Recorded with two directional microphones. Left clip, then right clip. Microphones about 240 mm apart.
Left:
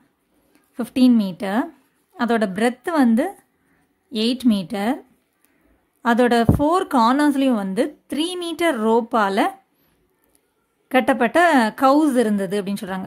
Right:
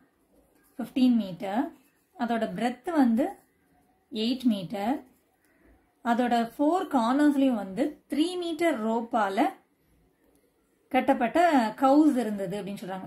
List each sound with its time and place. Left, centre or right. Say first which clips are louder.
0.7 s a woman's voice: left 8 dB; left
6.0 s a woman's voice: left 9 dB; left
10.9 s a woman's voice: left 7 dB; left